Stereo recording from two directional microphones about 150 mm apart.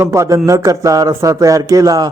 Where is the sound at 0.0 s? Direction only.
20° right (ahead or behind).